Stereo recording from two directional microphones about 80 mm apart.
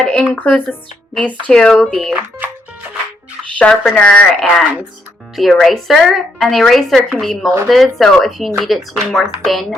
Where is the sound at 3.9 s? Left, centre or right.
Centre.